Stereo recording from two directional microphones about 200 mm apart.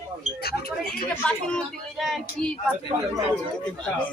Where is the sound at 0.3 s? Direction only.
50° left (ahead or behind).